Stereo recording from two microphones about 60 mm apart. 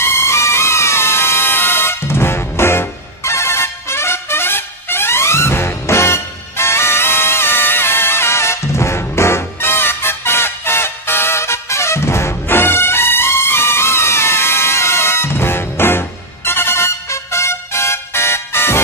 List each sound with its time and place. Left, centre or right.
0.0 s music: left